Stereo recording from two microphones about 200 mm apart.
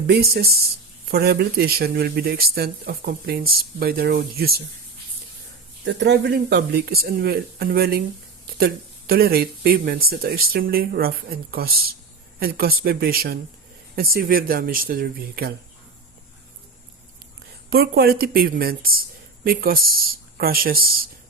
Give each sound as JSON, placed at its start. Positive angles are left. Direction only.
{"t": 0.1, "sound": "speech", "side_deg": -55}
{"t": 5.8, "sound": "speech", "side_deg": -60}
{"t": 17.7, "sound": "speech", "side_deg": -50}